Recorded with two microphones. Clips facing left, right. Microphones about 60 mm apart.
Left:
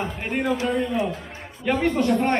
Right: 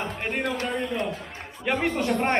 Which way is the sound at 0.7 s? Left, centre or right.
Centre.